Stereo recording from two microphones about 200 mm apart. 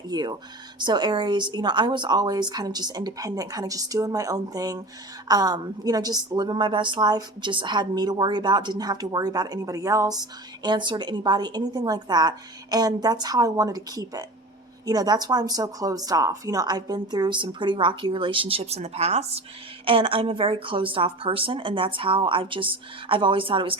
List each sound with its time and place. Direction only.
0.1 s a woman's voice: 20° right (ahead or behind)